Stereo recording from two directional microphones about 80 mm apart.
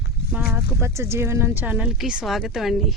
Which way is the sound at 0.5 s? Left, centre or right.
Right.